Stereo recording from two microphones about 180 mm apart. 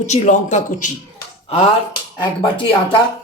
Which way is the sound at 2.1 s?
25° left (ahead or behind).